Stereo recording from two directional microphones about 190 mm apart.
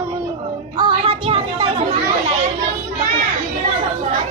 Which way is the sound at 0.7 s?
25° right (ahead or behind).